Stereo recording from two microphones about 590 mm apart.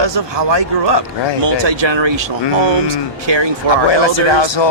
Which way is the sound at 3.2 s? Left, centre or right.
Right.